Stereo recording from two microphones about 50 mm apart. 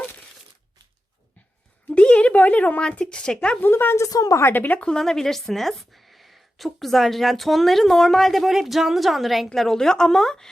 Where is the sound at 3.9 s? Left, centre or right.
Left.